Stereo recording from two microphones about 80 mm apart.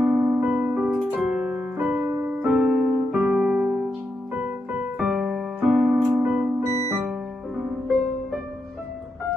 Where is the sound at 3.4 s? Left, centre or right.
Centre.